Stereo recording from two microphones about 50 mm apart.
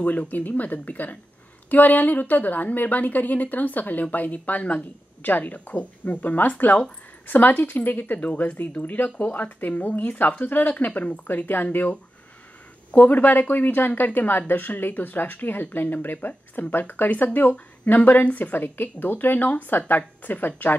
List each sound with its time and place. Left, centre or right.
0.0 s a woman's voice: left
12.9 s a woman's voice: left